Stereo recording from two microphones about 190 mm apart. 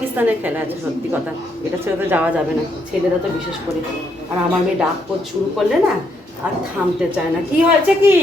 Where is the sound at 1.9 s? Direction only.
10° right (ahead or behind).